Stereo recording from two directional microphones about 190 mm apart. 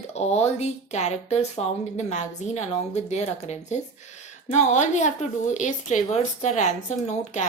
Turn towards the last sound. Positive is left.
turn(degrees=35)  # may be behind; listen again after turning